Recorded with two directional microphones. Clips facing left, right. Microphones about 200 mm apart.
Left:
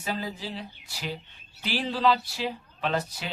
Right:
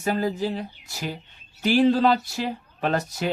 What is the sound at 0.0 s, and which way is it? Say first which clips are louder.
Speech: right 9 dB; 50° right (ahead or behind).